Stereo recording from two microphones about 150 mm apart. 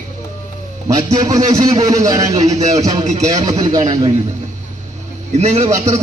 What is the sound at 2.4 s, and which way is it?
Speech, 50° right (ahead or behind).